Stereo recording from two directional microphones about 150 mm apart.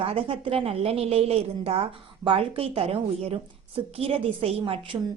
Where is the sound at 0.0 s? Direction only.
40° right (ahead or behind).